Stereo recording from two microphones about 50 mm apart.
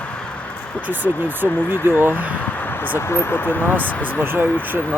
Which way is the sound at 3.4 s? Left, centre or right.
Left.